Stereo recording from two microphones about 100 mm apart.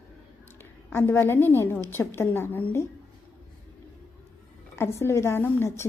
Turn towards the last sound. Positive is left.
turn(degrees=25)  # may be behind; listen again after turning